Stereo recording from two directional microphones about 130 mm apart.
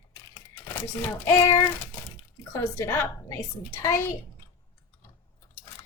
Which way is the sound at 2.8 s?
20° left (ahead or behind).